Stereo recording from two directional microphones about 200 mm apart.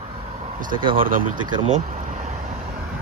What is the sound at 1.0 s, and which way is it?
Speech, 45° right (ahead or behind).